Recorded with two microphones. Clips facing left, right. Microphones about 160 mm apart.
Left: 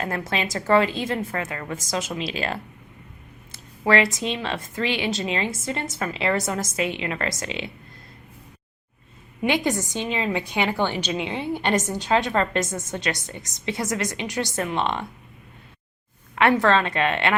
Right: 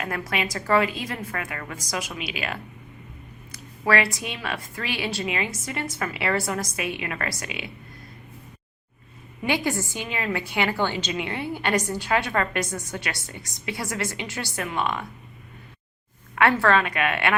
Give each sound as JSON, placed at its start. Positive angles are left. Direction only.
{"t": 0.0, "sound": "a woman's voice", "side_deg": 30}
{"t": 9.4, "sound": "a woman's voice", "side_deg": 20}
{"t": 16.3, "sound": "a woman's voice", "side_deg": 20}